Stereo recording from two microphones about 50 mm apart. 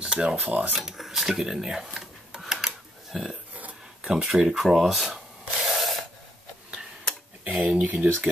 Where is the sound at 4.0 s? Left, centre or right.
Centre.